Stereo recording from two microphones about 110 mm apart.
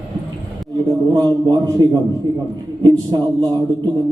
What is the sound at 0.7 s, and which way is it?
A man's voice, 40° right (ahead or behind).